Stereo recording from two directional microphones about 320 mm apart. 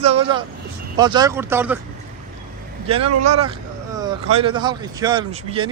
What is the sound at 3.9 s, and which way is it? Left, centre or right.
Speech, centre.